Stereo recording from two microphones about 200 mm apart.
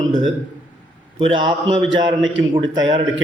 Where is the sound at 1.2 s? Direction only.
25° right (ahead or behind).